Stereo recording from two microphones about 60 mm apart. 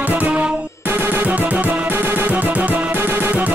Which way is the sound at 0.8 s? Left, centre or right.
Right.